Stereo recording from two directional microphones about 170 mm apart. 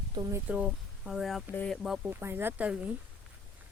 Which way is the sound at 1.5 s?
10° left (ahead or behind).